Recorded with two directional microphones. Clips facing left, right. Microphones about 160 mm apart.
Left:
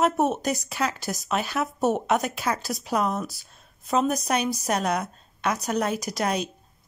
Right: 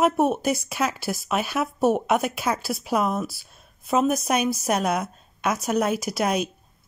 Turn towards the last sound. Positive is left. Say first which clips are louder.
# right 3 dB
turn(degrees=-10)  # may be behind; listen again after turning